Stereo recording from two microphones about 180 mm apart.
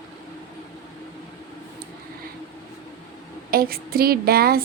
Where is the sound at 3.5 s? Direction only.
55° right (ahead or behind).